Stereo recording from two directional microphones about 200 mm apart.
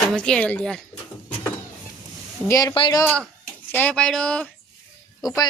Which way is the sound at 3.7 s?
10° left (ahead or behind).